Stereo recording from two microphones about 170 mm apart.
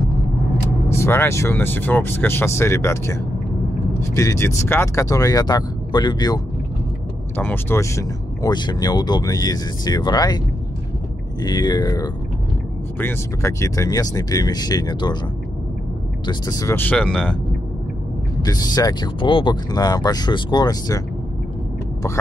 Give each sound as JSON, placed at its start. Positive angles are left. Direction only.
{"t": 0.8, "sound": "speech", "side_deg": 15}
{"t": 7.3, "sound": "speech", "side_deg": 10}
{"t": 11.4, "sound": "speech", "side_deg": 25}
{"t": 16.3, "sound": "speech", "side_deg": 20}
{"t": 18.4, "sound": "speech", "side_deg": 20}
{"t": 22.0, "sound": "speech", "side_deg": 15}